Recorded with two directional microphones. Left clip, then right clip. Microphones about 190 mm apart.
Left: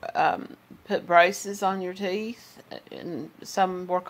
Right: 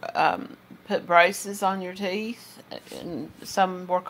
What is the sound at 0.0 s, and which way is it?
A woman's voice, 15° left (ahead or behind).